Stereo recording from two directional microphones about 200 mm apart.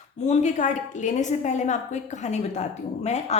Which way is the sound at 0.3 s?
35° left (ahead or behind).